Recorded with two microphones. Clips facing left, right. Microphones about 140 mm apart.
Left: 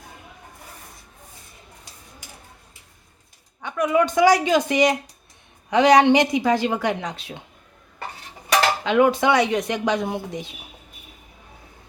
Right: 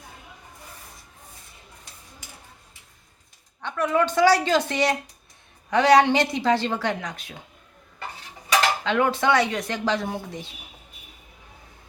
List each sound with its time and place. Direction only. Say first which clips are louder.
3.6 s speech: left 3 dB; 10° left (ahead or behind)
8.8 s speech: left 4 dB; 15° left (ahead or behind)